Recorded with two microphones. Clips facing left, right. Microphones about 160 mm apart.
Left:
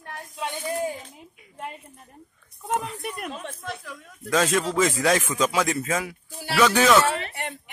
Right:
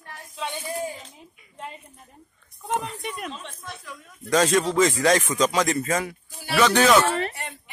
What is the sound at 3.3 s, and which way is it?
Speech, 60° left (ahead or behind).